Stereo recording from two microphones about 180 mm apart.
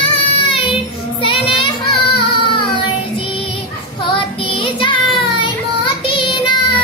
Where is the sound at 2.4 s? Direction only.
25° left (ahead or behind).